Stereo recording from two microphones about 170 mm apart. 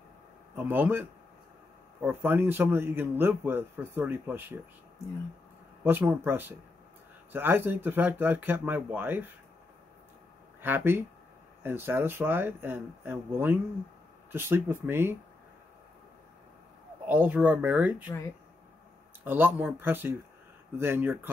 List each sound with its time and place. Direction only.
0.6 s a man's voice: 10° right (ahead or behind)
5.9 s a man's voice: 10° right (ahead or behind)
10.6 s a man's voice: 10° right (ahead or behind)
17.0 s a man's voice: 10° right (ahead or behind)
19.2 s a man's voice: 10° right (ahead or behind)